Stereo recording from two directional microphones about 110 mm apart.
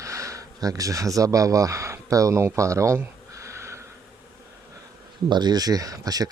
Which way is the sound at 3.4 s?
25° right (ahead or behind).